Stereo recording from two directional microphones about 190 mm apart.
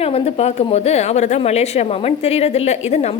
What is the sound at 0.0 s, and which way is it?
A woman's voice, 30° left (ahead or behind).